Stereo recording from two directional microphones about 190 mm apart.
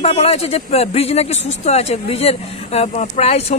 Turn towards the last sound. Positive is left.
turn(degrees=35)  # may be behind; listen again after turning